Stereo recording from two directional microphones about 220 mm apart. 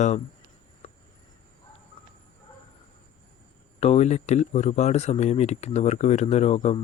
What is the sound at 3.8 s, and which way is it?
Speech, 30° left (ahead or behind).